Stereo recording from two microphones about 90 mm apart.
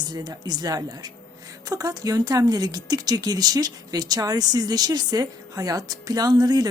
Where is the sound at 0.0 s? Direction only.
50° right (ahead or behind).